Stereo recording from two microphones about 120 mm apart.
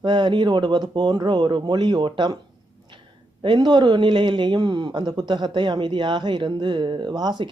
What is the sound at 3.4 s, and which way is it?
Speech, 40° right (ahead or behind).